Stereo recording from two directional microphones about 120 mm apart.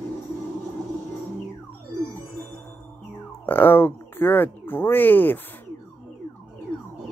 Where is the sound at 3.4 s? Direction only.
15° left (ahead or behind).